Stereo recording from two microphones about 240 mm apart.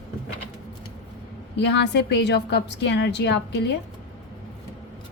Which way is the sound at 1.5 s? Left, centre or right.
Left.